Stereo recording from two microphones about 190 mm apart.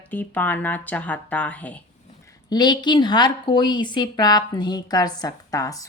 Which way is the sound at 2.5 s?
20° left (ahead or behind).